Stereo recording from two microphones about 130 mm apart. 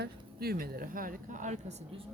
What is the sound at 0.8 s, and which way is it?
Speech, 90° right.